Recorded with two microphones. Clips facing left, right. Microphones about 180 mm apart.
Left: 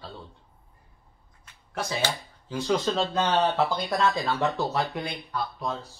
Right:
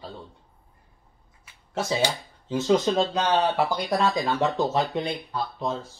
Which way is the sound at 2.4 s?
20° right (ahead or behind).